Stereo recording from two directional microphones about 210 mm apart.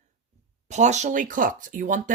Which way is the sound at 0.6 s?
35° right (ahead or behind).